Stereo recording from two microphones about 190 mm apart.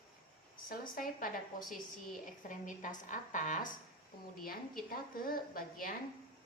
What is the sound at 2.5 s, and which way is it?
A woman's voice, 40° left (ahead or behind).